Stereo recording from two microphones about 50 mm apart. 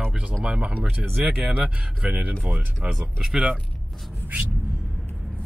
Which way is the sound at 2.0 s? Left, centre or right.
Centre.